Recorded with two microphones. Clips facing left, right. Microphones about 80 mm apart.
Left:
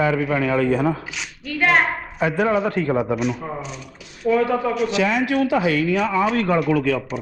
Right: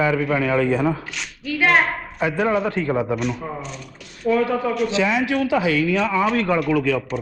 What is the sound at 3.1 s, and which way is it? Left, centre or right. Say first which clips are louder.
A woman's voice: left 1 dB; centre.